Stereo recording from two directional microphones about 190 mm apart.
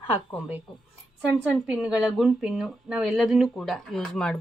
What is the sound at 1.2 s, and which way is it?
Speech, centre (ahead or behind).